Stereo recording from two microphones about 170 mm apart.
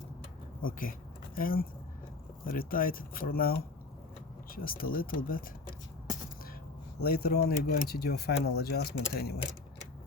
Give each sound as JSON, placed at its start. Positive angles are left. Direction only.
{"t": 0.6, "sound": "speech", "side_deg": 55}
{"t": 7.0, "sound": "speech", "side_deg": 65}